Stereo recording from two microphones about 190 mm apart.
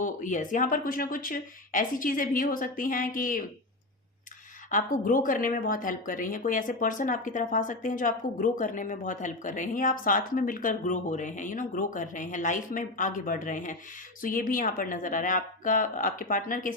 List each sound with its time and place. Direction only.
0.0 s speech: 40° left (ahead or behind)
4.7 s speech: 45° left (ahead or behind)